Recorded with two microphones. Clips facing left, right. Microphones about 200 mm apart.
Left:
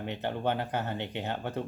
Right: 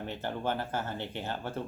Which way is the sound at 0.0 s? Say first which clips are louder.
Left 3 dB; 20° left (ahead or behind).